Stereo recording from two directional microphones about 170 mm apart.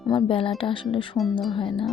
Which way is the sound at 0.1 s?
30° left (ahead or behind).